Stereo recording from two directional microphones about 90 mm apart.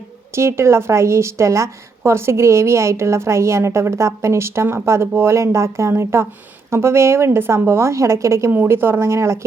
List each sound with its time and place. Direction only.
0.3 s a woman's voice: 30° right (ahead or behind)